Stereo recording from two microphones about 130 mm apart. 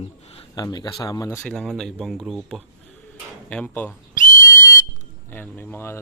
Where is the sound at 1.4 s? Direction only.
5° left (ahead or behind).